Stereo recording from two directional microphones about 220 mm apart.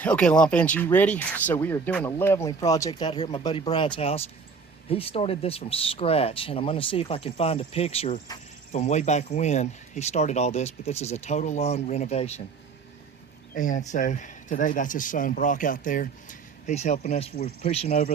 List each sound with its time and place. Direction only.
0.0 s speech: 5° left (ahead or behind); by 12.4 s 30° left (ahead or behind)
13.5 s speech: 35° left (ahead or behind)